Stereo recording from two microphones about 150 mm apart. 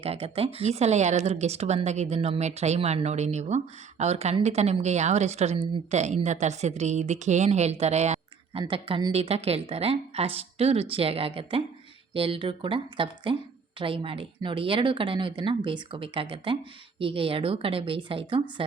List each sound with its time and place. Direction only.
0.0 s speech: 40° right (ahead or behind)
9.1 s a woman's voice: 45° right (ahead or behind)